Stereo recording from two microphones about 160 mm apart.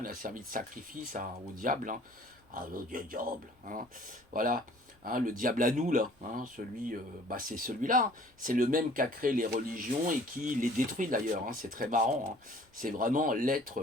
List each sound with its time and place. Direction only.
0.0 s speech: 60° right (ahead or behind)
4.4 s speech: 60° right (ahead or behind)